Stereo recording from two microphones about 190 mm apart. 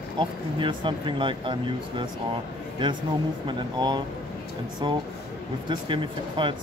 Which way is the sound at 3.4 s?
20° right (ahead or behind).